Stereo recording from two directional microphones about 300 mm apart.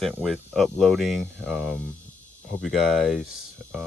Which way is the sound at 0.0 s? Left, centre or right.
Centre.